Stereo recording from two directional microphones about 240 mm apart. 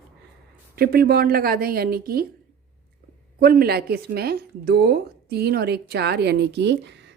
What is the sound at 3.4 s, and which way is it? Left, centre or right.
A woman's voice, right.